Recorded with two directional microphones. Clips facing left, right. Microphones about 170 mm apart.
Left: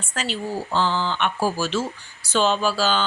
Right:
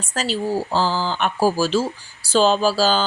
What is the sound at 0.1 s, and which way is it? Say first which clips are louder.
Speech: right 5 dB; 35° right (ahead or behind).